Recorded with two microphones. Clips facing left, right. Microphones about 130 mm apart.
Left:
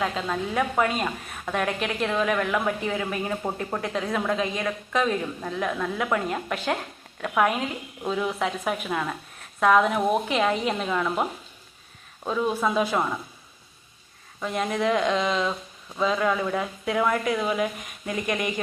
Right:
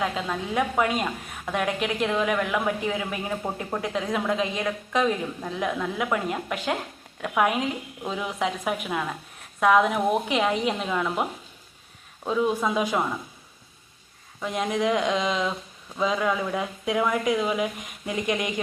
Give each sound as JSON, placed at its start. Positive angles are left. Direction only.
{"t": 0.0, "sound": "speech", "side_deg": -10}
{"t": 3.4, "sound": "speech", "side_deg": 5}
{"t": 3.8, "sound": "speech", "side_deg": -15}
{"t": 14.4, "sound": "speech", "side_deg": -15}